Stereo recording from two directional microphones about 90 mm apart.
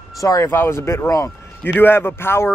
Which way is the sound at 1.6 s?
20° left (ahead or behind).